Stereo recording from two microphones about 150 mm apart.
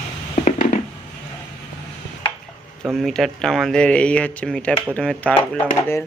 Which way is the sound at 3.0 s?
Centre (ahead or behind).